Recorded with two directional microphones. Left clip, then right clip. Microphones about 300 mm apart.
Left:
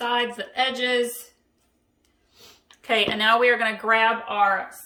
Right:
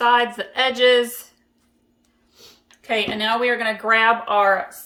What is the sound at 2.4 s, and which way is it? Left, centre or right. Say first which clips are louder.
Speech: right 1 dB; centre.